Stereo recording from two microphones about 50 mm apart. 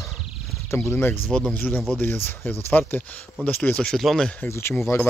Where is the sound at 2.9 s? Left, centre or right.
Left.